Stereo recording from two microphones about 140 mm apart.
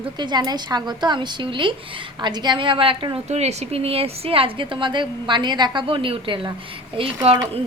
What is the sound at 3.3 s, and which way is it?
A woman's voice, 50° right (ahead or behind).